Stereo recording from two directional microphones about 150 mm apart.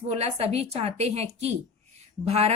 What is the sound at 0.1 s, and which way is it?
A woman's voice, 45° right (ahead or behind).